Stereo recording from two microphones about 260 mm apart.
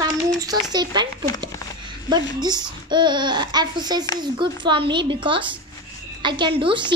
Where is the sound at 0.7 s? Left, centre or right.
Centre.